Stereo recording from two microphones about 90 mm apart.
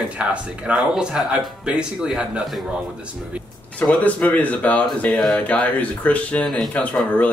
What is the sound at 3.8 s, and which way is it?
Speech, 15° left (ahead or behind).